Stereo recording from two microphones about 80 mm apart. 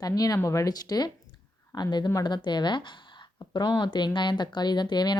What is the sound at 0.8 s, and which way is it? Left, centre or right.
A woman's voice, left.